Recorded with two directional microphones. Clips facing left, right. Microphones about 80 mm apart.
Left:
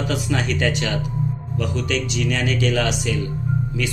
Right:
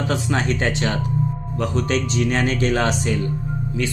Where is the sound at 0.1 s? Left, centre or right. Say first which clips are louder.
Right 3 dB; right.